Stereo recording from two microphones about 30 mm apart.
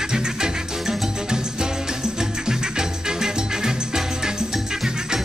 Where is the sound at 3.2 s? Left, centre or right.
Centre.